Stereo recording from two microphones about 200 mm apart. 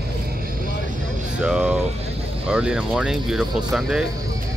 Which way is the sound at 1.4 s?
5° right (ahead or behind).